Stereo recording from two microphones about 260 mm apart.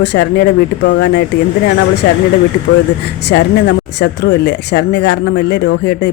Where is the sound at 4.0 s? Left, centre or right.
Left.